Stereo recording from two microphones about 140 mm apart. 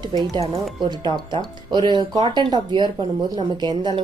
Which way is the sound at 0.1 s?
30° right (ahead or behind).